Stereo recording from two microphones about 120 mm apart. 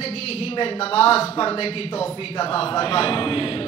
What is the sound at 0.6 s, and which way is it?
A man's voice, 55° left (ahead or behind).